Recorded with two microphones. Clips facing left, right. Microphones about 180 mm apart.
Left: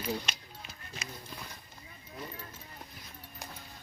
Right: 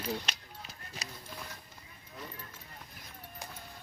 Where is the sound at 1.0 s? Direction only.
35° right (ahead or behind).